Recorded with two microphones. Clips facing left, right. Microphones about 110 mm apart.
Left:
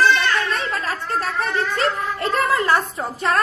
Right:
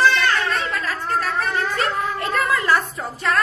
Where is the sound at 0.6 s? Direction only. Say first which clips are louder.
Even; 35° left (ahead or behind).